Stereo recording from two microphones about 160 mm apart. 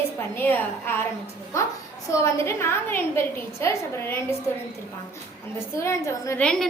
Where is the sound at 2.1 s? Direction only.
20° left (ahead or behind).